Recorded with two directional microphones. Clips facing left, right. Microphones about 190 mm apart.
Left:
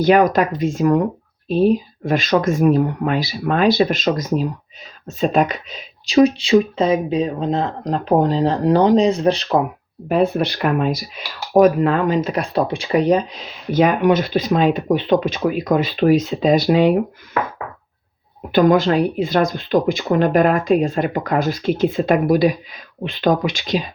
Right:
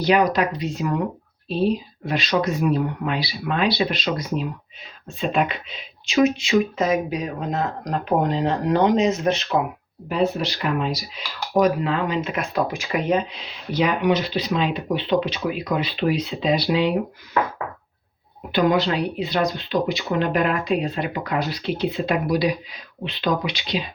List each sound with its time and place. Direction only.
0.0 s speech: 50° left (ahead or behind)
10.1 s speech: 55° left (ahead or behind)
18.5 s speech: 45° left (ahead or behind)